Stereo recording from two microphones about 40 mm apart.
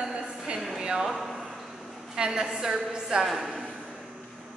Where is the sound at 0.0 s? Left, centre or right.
Right.